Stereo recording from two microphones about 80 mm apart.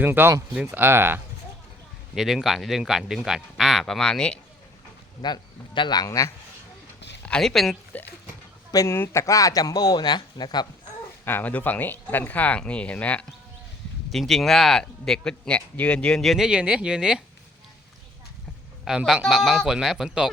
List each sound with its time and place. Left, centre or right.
0.0 s speech: right
2.1 s a man's voice: centre
5.2 s a man's voice: left
6.1 s a man's voice: left
7.2 s a sound: centre
7.4 s a man's voice: centre
8.9 s speech: left
11.3 s speech: left
14.1 s a man's voice: centre
16.5 s speech: centre
18.9 s a man's voice: centre